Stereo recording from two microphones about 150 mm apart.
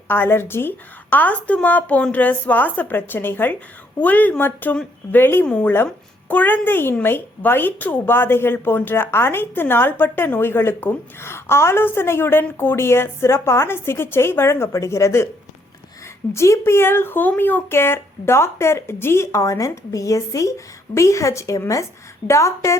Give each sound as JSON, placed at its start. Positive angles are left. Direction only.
{"t": 0.1, "sound": "speech", "side_deg": 15}
{"t": 16.3, "sound": "a woman's voice", "side_deg": 20}